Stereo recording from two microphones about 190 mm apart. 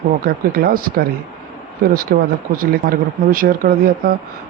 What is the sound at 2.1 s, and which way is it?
Speech, 55° right (ahead or behind).